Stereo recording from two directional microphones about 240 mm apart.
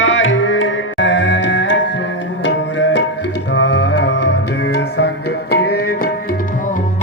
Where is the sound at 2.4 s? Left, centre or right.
Left.